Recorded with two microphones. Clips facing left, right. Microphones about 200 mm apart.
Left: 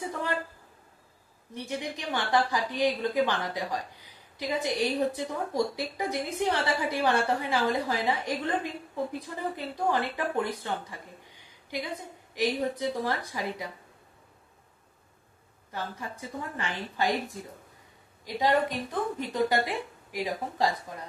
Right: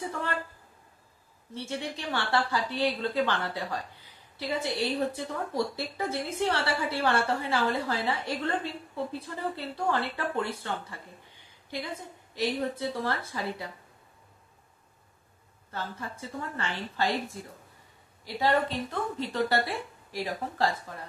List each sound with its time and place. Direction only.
1.5 s a woman's voice: 15° left (ahead or behind)
12.4 s a woman's voice: 15° left (ahead or behind)
15.7 s a woman's voice: 15° left (ahead or behind)